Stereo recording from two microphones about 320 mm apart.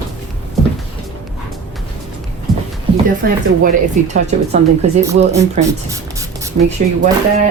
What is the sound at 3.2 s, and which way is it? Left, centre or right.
Speech, right.